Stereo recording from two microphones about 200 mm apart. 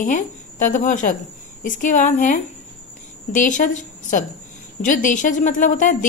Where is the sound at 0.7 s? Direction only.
40° left (ahead or behind).